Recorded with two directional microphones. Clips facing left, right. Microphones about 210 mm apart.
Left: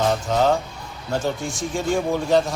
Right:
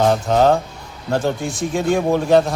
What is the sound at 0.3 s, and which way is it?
Speech, 55° right (ahead or behind).